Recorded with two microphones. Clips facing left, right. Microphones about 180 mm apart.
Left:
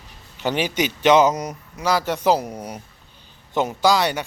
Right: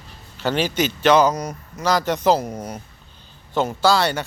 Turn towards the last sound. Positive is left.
turn(degrees=15)  # may be behind; listen again after turning